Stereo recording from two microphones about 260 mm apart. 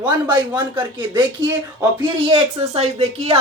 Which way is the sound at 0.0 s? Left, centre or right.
Centre.